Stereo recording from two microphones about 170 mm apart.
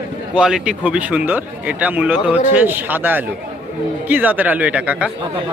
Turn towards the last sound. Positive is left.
turn(degrees=-10)  # may be behind; listen again after turning